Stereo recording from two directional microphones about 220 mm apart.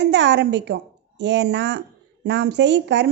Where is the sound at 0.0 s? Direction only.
50° right (ahead or behind).